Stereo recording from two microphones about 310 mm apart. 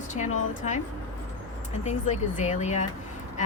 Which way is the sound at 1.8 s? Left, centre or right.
Left.